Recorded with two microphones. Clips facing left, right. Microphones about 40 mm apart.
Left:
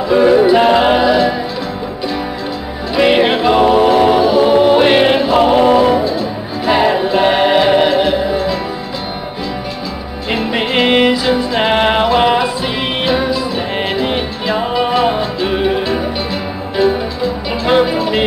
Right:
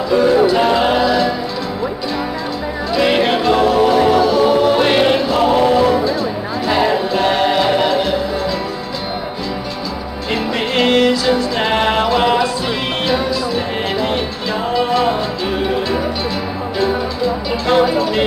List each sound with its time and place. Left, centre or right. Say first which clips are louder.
0.1 s music: left 3 dB; centre
3.0 s music: left 4 dB; centre
10.3 s music: left 2 dB; left
17.6 s music: left 1 dB; centre